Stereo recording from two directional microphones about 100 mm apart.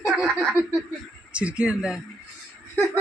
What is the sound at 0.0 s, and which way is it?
Snicker, centre (ahead or behind).